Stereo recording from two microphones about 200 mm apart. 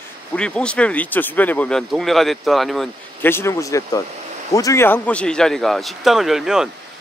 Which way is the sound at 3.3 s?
15° left (ahead or behind).